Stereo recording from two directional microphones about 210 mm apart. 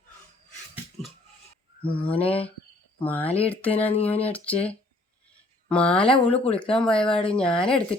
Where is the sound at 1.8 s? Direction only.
25° left (ahead or behind).